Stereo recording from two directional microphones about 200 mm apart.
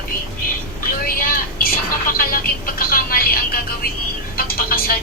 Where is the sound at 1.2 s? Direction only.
45° left (ahead or behind).